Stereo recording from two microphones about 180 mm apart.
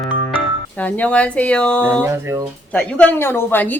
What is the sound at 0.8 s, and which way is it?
A woman's voice, 10° left (ahead or behind).